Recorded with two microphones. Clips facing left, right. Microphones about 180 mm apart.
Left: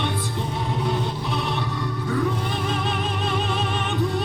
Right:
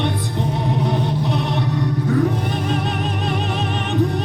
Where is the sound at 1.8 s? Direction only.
40° right (ahead or behind).